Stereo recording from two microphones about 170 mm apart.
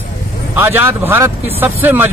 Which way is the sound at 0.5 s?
10° right (ahead or behind).